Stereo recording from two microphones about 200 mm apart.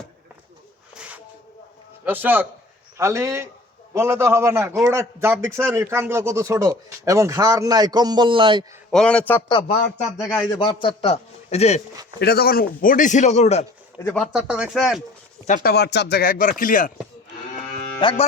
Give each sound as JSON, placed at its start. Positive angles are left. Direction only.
{"t": 0.9, "sound": "a sound", "side_deg": -5}
{"t": 2.0, "sound": "a man's voice", "side_deg": -10}
{"t": 8.9, "sound": "speech", "side_deg": 5}
{"t": 9.5, "sound": "a man's voice", "side_deg": 25}
{"t": 12.2, "sound": "a man's voice", "side_deg": 50}
{"t": 14.0, "sound": "speech", "side_deg": 0}
{"t": 15.4, "sound": "speech", "side_deg": 45}
{"t": 18.0, "sound": "speech", "side_deg": 25}